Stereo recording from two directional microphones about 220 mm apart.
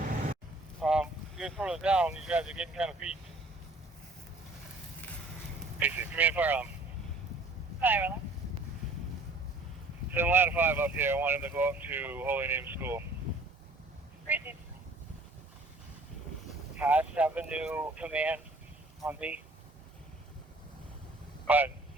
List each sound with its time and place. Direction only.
0.8 s speech: 5° right (ahead or behind)
5.8 s speech: 5° right (ahead or behind)
7.8 s speech: 10° right (ahead or behind)
10.2 s speech: 10° right (ahead or behind)
14.3 s speech: 10° right (ahead or behind)
16.7 s speech: 5° right (ahead or behind)
21.4 s speech: 5° right (ahead or behind)